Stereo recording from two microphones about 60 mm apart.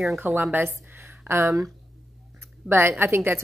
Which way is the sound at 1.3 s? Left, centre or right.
Right.